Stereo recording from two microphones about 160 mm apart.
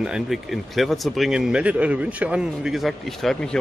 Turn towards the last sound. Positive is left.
turn(degrees=5)  # may be behind; listen again after turning